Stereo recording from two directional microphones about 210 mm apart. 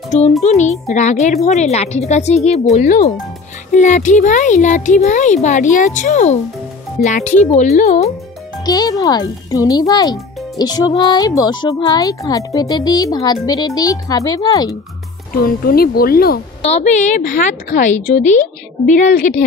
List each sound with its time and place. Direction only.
0.4 s a woman's voice: 35° left (ahead or behind)
8.6 s speech: 15° left (ahead or behind)
15.3 s speech: 45° left (ahead or behind)
16.6 s a woman's voice: 30° left (ahead or behind)